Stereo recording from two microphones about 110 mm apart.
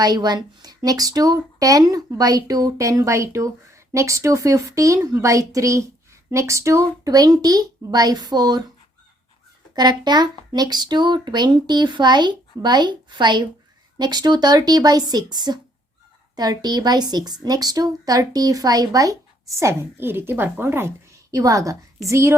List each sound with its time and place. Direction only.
0.0 s a woman's voice: 40° right (ahead or behind)
9.7 s a woman's voice: 40° right (ahead or behind)